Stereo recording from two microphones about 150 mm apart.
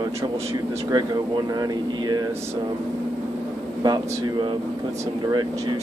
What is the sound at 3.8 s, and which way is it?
Speech, 30° right (ahead or behind).